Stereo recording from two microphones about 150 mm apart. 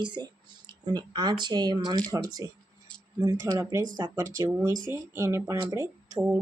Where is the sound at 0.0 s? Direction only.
30° right (ahead or behind).